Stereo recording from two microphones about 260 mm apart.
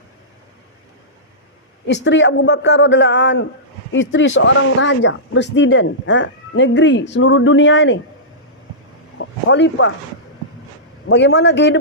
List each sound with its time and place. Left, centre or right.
1.9 s speech: left
9.1 s a sound: left
11.1 s speech: left